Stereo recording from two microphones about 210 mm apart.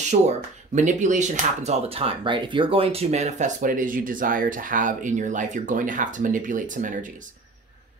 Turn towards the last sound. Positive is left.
turn(degrees=-40)  # may be behind; listen again after turning